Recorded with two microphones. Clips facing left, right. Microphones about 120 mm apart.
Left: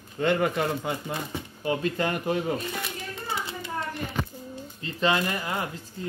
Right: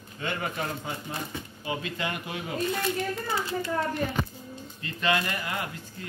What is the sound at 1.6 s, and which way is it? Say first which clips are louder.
Speech: left 6 dB; 45° left (ahead or behind).